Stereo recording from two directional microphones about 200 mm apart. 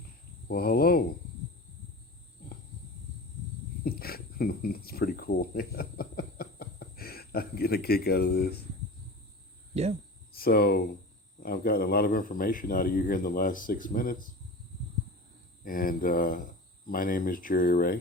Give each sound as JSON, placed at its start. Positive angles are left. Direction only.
{"t": 0.4, "sound": "cricket", "side_deg": 50}
{"t": 3.8, "sound": "speech", "side_deg": 50}
{"t": 10.3, "sound": "speech", "side_deg": 50}
{"t": 15.6, "sound": "speech", "side_deg": 45}